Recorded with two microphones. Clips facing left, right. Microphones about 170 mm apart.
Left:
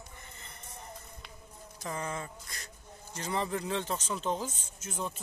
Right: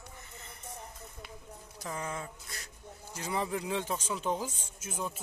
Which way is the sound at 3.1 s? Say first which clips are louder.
Even; 10° right (ahead or behind).